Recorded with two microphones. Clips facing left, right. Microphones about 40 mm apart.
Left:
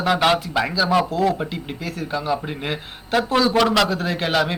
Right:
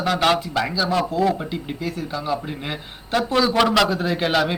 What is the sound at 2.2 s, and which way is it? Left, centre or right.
A man's voice, centre.